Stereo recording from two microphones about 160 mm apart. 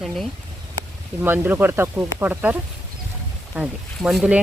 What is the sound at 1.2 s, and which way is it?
Speech, 10° right (ahead or behind).